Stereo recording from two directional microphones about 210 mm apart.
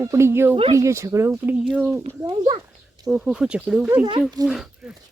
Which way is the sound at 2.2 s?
20° right (ahead or behind).